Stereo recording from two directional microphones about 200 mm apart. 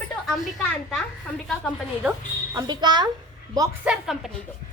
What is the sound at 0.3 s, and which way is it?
Speech, centre (ahead or behind).